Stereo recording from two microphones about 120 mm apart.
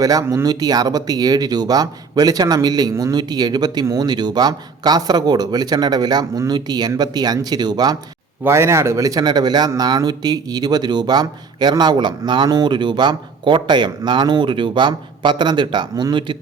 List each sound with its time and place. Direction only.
0.0 s a man's voice: 30° right (ahead or behind)
8.4 s a man's voice: 20° right (ahead or behind); by 16.4 s 40° right (ahead or behind)